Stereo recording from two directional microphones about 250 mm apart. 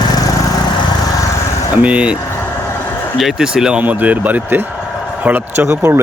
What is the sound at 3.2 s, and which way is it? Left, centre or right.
Speech, centre.